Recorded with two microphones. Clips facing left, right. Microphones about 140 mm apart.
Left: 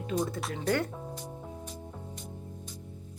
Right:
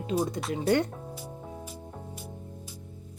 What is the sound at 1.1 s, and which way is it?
Music, 5° right (ahead or behind).